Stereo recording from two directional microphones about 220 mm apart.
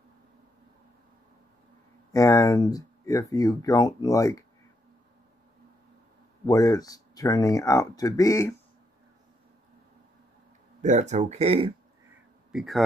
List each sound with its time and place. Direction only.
2.1 s speech: 15° left (ahead or behind)
6.4 s speech: 15° left (ahead or behind)
10.8 s speech: 35° right (ahead or behind)
12.5 s speech: centre (ahead or behind)